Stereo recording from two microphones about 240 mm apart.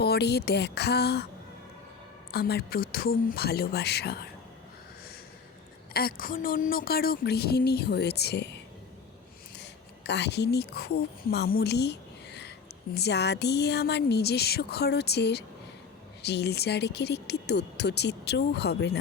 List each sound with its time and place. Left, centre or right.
0.0 s speech: left
2.3 s a woman's voice: left
5.9 s a woman's voice: left